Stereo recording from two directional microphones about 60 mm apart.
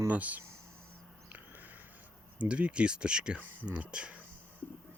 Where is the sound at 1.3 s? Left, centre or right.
Right.